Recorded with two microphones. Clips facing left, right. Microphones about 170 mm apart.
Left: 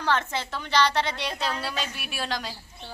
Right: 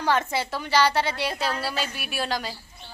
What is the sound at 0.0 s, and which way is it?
A woman's voice, 10° right (ahead or behind).